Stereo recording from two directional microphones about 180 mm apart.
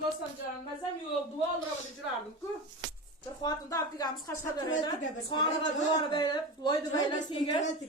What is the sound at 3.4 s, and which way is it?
A woman's voice, 20° left (ahead or behind).